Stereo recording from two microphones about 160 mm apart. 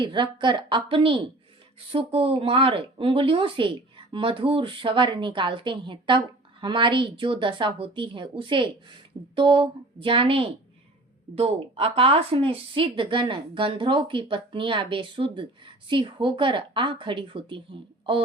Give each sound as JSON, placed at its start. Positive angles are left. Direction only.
{"t": 0.0, "sound": "a woman's voice", "side_deg": -30}